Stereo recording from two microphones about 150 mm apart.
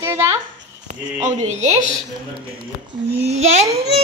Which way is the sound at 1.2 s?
50° right (ahead or behind).